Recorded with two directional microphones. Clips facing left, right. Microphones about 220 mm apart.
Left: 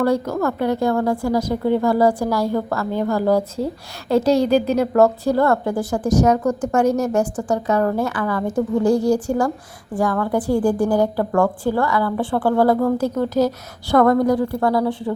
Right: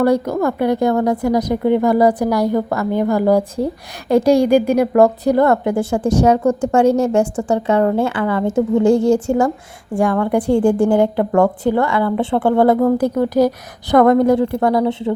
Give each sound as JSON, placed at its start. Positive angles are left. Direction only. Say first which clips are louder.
{"t": 0.0, "sound": "a woman's voice", "louder": "right 4 dB", "side_deg": -15}